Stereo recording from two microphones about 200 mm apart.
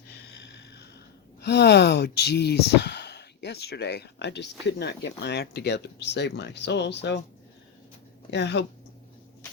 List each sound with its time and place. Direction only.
0.1 s a sound: 55° left (ahead or behind)
1.4 s speech: 55° left (ahead or behind)
8.3 s speech: 60° left (ahead or behind)